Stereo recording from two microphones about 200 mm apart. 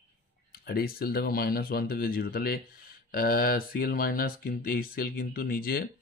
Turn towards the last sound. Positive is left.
turn(degrees=50)  # may be behind; listen again after turning